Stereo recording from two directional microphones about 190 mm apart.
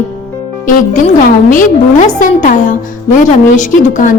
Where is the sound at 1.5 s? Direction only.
40° left (ahead or behind).